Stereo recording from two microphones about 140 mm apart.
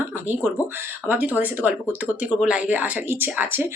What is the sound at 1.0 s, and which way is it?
Speech, 15° right (ahead or behind).